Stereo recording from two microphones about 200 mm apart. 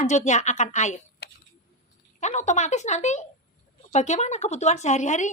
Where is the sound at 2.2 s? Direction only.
35° left (ahead or behind).